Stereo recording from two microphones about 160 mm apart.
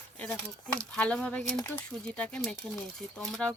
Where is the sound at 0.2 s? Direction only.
5° left (ahead or behind).